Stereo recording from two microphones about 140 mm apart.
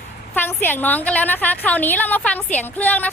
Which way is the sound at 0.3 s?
15° left (ahead or behind).